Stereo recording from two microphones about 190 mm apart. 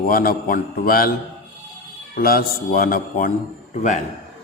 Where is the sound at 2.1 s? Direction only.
50° left (ahead or behind).